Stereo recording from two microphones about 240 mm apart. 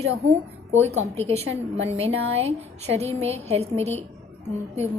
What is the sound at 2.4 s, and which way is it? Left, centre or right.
A woman's voice, right.